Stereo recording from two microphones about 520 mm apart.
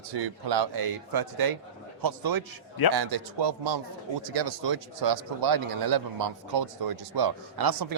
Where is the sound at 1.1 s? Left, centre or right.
Right.